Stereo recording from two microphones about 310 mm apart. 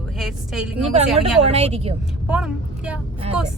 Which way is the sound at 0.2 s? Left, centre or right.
Centre.